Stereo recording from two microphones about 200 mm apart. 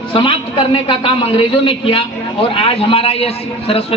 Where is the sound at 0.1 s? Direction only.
25° left (ahead or behind).